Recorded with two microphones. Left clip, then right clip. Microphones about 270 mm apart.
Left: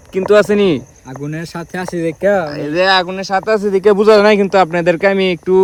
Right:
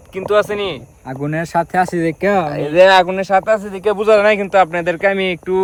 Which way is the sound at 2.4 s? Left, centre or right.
Centre.